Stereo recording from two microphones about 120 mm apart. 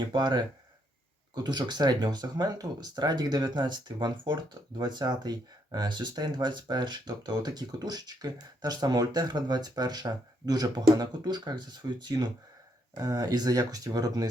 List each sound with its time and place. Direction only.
0.0 s speech: 40° right (ahead or behind)